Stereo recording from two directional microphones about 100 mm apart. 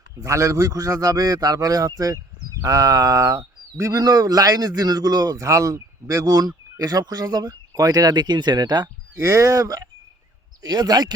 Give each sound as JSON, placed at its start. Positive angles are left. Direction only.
{"t": 0.2, "sound": "speech", "side_deg": -30}
{"t": 9.1, "sound": "speech", "side_deg": -30}